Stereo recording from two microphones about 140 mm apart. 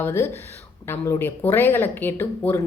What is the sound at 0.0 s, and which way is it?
Speech, 15° left (ahead or behind).